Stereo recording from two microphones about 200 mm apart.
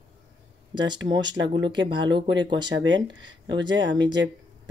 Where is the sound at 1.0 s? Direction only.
20° right (ahead or behind).